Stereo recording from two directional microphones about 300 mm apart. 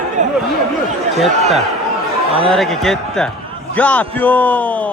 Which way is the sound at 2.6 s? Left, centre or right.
Centre.